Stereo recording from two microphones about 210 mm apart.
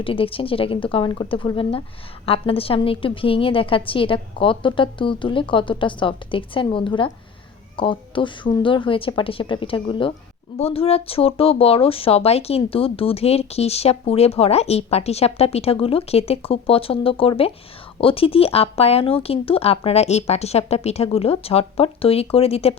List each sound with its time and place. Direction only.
0.0 s speech: 25° left (ahead or behind)